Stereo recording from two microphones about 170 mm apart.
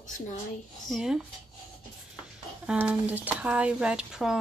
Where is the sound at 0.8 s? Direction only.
Centre (ahead or behind).